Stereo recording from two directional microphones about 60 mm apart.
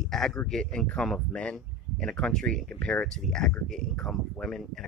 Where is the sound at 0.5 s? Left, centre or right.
Centre.